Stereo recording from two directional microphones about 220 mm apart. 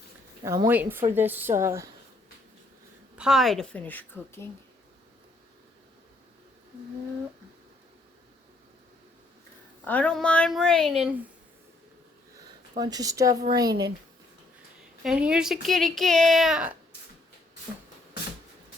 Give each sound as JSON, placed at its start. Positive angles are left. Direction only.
{"t": 0.4, "sound": "a woman's voice", "side_deg": -15}
{"t": 3.2, "sound": "speech", "side_deg": 0}
{"t": 9.8, "sound": "speech", "side_deg": 5}
{"t": 12.7, "sound": "a woman's voice", "side_deg": -20}
{"t": 15.0, "sound": "speech", "side_deg": -5}